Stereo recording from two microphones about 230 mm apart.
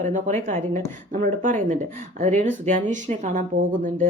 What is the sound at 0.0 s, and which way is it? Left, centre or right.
Speech, right.